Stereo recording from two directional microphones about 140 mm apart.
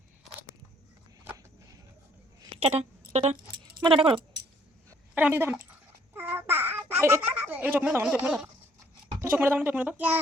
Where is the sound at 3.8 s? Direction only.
40° right (ahead or behind).